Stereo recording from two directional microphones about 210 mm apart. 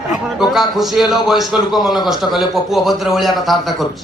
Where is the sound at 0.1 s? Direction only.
Centre (ahead or behind).